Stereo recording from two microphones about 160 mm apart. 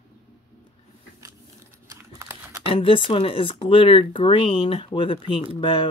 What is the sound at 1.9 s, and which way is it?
Crumpling, 20° right (ahead or behind).